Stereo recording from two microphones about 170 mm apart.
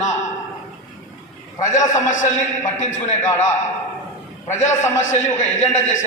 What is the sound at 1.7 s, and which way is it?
A man's voice, 45° left (ahead or behind).